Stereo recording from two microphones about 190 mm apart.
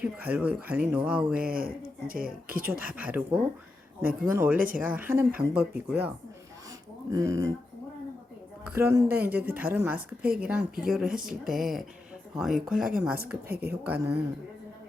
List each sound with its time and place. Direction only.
0.0 s speech: 5° right (ahead or behind)
1.5 s speech: 50° right (ahead or behind)
2.8 s speech: 5° right (ahead or behind)
4.5 s speech: 45° right (ahead or behind)
4.8 s speech: 10° right (ahead or behind)
7.1 s speech: 15° right (ahead or behind)
8.7 s speech: 15° right (ahead or behind)